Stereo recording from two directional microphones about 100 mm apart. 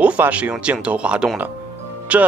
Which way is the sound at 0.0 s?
15° right (ahead or behind).